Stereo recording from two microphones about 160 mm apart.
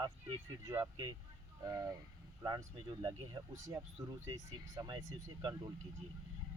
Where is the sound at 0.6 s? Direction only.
15° right (ahead or behind).